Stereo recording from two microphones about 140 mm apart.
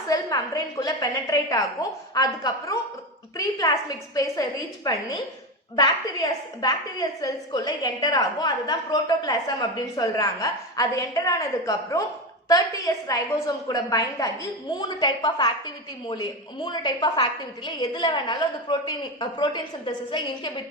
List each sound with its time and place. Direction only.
0.1 s a woman's voice: 25° left (ahead or behind)